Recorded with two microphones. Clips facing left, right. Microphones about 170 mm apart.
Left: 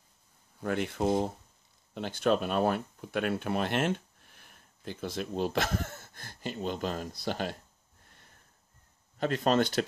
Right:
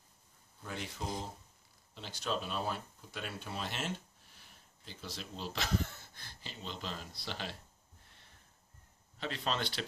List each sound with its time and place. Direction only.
0.6 s speech: 60° left (ahead or behind)
9.2 s speech: 50° left (ahead or behind)